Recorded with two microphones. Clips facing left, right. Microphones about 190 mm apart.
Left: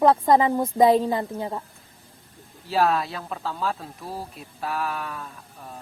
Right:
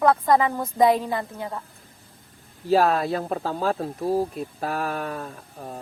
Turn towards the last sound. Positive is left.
turn(degrees=-40)  # may be behind; listen again after turning